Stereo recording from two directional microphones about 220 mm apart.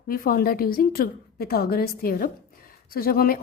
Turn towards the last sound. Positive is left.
turn(degrees=40)  # may be behind; listen again after turning